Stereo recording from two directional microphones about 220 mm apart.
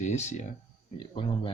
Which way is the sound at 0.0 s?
30° left (ahead or behind).